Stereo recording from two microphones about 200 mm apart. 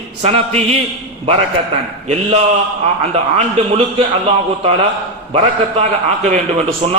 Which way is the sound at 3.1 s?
30° right (ahead or behind).